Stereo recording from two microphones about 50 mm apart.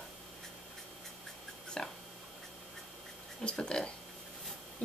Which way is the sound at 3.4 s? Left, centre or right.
Centre.